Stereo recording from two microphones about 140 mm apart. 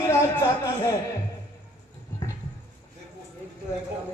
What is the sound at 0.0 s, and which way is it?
Speech, 20° left (ahead or behind).